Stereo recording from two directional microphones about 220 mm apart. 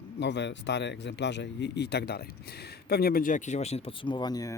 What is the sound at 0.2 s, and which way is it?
Speech, 50° left (ahead or behind).